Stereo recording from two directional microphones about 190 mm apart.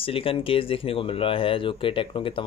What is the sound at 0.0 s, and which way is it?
Speech, 30° left (ahead or behind).